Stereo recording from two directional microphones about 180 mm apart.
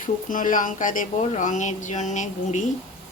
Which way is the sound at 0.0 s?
45° left (ahead or behind).